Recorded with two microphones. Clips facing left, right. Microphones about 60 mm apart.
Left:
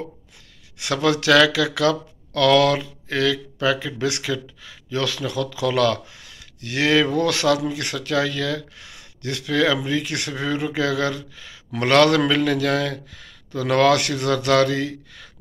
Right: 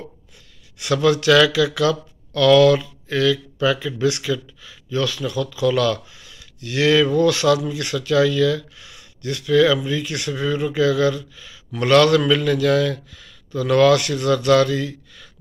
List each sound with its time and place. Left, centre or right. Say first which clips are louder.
0.7 s speech: right 3 dB; left